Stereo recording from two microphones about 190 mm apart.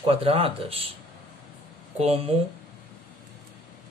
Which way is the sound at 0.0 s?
30° right (ahead or behind).